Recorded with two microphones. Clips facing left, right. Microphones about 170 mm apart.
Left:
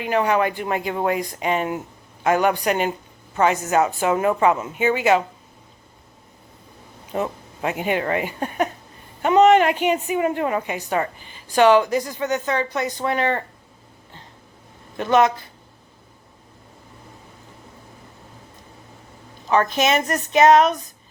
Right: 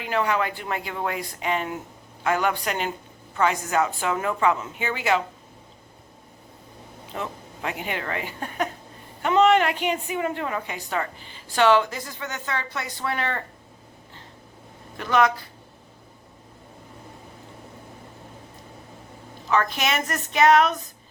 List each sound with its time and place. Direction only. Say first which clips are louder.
0.0 s speech: left 5 dB; 15° left (ahead or behind)
7.2 s speech: left 7 dB; 20° left (ahead or behind)
14.9 s speech: left 4 dB; 20° left (ahead or behind)
19.7 s speech: left 6 dB; 20° left (ahead or behind)